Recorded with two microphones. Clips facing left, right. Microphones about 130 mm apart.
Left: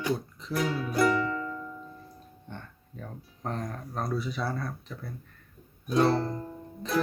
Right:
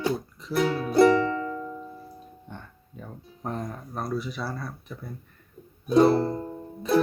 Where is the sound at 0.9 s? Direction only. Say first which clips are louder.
Right 7 dB; 35° right (ahead or behind).